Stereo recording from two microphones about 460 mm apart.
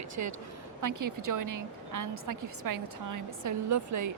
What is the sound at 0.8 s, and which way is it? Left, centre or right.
A woman's voice, right.